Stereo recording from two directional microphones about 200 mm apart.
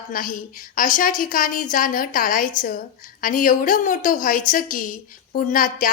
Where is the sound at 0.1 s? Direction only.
45° left (ahead or behind).